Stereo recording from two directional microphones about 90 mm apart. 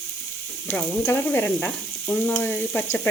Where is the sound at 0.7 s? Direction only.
20° left (ahead or behind).